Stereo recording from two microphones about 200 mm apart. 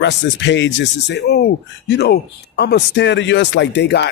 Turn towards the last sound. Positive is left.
turn(degrees=60)  # may be behind; listen again after turning